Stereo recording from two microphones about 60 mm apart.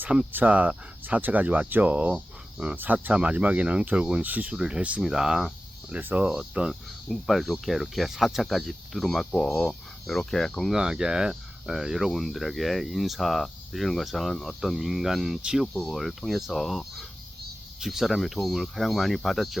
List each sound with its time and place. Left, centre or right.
0.3 s speech: right
2.7 s speech: right
4.5 s speech: centre
5.0 s speech: centre
6.0 s speech: right
7.1 s speech: centre
10.7 s speech: centre
15.4 s speech: centre
15.7 s speech: centre